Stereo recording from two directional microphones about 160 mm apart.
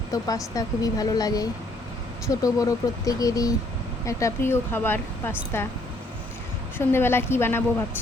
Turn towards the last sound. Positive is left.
turn(degrees=15)  # may be behind; listen again after turning